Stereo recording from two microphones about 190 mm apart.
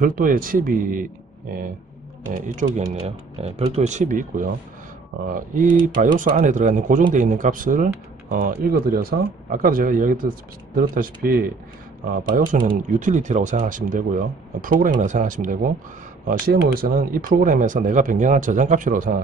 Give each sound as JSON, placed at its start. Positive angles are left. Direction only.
{"t": 0.0, "sound": "speech", "side_deg": -45}
{"t": 2.3, "sound": "speech", "side_deg": -40}